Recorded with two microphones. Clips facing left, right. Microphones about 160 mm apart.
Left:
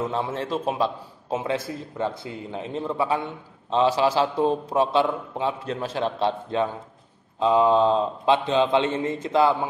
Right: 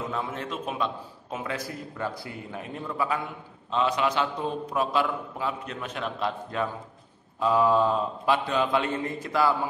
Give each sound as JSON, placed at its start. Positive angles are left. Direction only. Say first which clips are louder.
{"t": 0.0, "sound": "a man's voice", "louder": "left 5 dB", "side_deg": 30}